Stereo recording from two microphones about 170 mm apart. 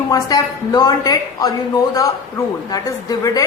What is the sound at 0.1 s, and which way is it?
A woman's voice, 20° left (ahead or behind).